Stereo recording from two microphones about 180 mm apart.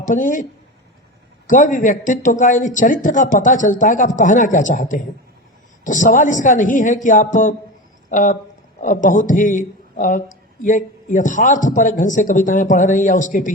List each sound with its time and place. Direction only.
0.0 s speech: 45° left (ahead or behind)
1.5 s speech: 45° left (ahead or behind)